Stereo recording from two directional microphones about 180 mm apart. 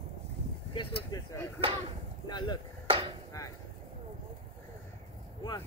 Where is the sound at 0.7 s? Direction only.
25° left (ahead or behind).